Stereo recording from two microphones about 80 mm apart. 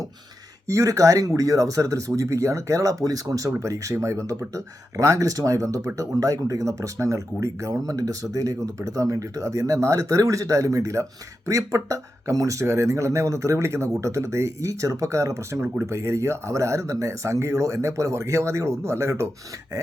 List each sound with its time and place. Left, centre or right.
0.7 s speech: right